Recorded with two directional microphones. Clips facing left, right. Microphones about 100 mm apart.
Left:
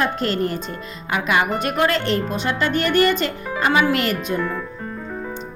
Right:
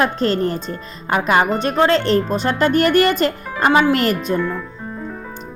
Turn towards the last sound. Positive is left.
turn(degrees=-40)  # may be behind; listen again after turning